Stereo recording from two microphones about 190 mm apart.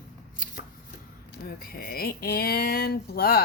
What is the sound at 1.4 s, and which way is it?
Speech, 50° left (ahead or behind).